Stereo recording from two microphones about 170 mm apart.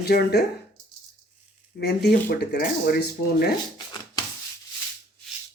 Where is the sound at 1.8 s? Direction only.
70° left (ahead or behind).